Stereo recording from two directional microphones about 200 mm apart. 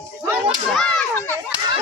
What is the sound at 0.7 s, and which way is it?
Speech, 5° left (ahead or behind).